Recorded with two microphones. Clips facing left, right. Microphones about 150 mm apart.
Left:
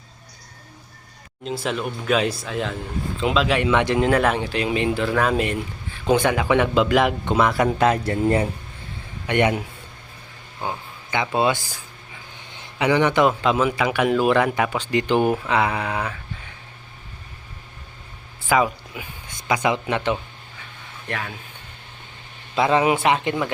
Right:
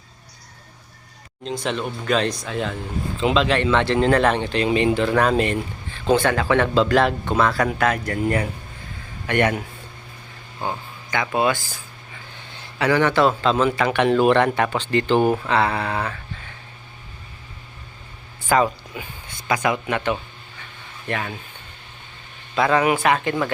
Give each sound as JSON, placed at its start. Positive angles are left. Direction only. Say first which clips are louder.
{"t": 1.5, "sound": "speech", "louder": "even", "side_deg": 5}
{"t": 11.1, "sound": "speech", "louder": "even", "side_deg": 20}
{"t": 18.4, "sound": "speech", "louder": "right 1 dB", "side_deg": 10}
{"t": 19.6, "sound": "speech", "louder": "left 1 dB", "side_deg": 20}
{"t": 21.1, "sound": "speech", "louder": "right 3 dB", "side_deg": 0}
{"t": 22.5, "sound": "speech", "louder": "even", "side_deg": 25}